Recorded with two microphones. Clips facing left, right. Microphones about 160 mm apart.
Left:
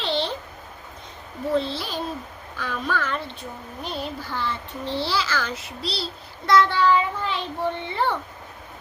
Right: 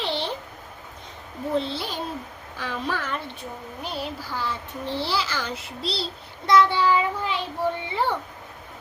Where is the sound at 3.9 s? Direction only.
10° right (ahead or behind).